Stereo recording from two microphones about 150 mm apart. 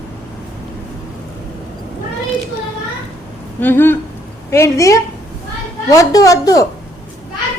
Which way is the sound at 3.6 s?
15° left (ahead or behind).